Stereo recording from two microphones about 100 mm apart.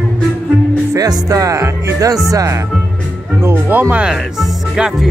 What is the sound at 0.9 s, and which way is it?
Speech, 35° right (ahead or behind).